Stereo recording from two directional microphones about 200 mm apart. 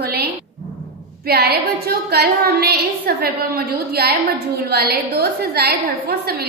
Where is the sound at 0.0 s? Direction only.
50° right (ahead or behind).